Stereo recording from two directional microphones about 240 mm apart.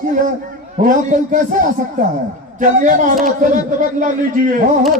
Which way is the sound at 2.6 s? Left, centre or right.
Right.